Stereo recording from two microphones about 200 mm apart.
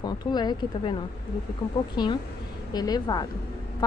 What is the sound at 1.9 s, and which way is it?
Speech, 20° left (ahead or behind).